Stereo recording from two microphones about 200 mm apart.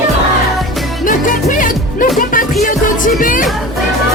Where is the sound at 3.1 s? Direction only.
40° left (ahead or behind).